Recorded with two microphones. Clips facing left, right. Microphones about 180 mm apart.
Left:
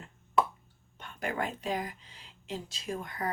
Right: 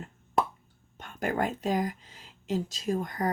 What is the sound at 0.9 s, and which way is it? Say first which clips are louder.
Speech: right 5 dB; 45° right (ahead or behind).